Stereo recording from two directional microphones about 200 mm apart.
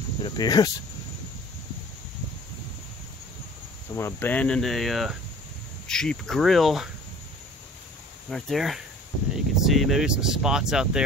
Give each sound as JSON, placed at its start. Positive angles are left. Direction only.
{"t": 0.2, "sound": "speech", "side_deg": 20}
{"t": 3.9, "sound": "speech", "side_deg": 10}
{"t": 8.3, "sound": "speech", "side_deg": 0}